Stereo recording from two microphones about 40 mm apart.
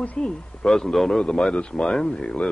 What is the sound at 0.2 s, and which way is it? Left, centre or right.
Speech, left.